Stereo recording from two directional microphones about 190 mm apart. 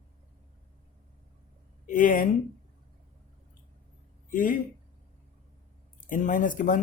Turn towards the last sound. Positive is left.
turn(degrees=45)  # may be behind; listen again after turning